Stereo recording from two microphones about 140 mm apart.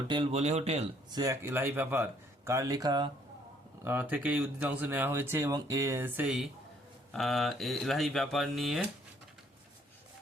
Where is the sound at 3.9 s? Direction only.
10° right (ahead or behind).